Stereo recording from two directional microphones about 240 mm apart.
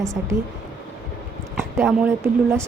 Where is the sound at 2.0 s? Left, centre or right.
Centre.